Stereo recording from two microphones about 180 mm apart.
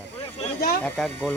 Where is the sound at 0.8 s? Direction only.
Centre (ahead or behind).